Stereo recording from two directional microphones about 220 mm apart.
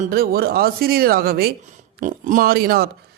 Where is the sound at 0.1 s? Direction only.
45° right (ahead or behind).